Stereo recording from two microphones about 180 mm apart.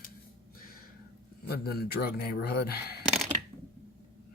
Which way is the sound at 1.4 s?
60° left (ahead or behind).